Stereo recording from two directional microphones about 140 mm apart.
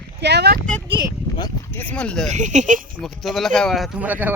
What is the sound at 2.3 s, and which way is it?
Speech, 60° right (ahead or behind).